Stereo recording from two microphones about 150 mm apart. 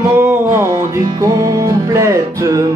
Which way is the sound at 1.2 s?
20° right (ahead or behind).